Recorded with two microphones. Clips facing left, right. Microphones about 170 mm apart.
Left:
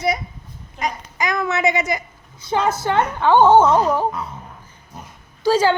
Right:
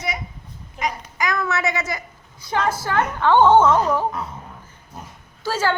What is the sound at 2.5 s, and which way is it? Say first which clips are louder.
Speech: left 3 dB; 25° left (ahead or behind).